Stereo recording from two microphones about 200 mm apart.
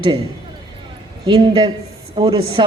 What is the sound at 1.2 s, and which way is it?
A woman's voice, 25° right (ahead or behind).